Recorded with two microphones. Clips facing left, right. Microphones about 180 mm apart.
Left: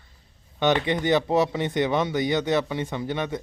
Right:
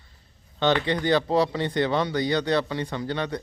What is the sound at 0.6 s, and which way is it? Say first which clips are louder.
Speech: left 1 dB; 20° left (ahead or behind).